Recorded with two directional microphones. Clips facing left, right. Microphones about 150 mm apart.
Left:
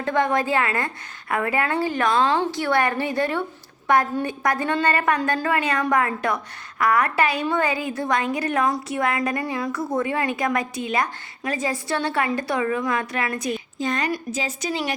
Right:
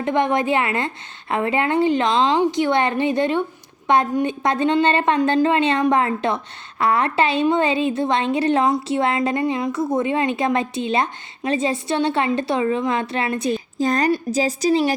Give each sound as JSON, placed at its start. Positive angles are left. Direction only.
{"t": 0.0, "sound": "a woman's voice", "side_deg": -20}